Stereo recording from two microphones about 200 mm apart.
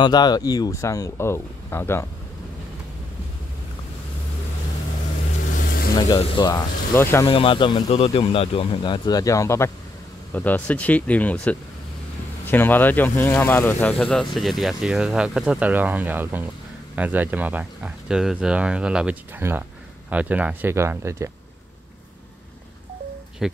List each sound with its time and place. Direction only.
0.0 s speech: 20° left (ahead or behind)
5.9 s speech: 20° left (ahead or behind)
7.2 s speech: 25° left (ahead or behind); by 21.3 s 15° right (ahead or behind)
23.4 s speech: 5° right (ahead or behind)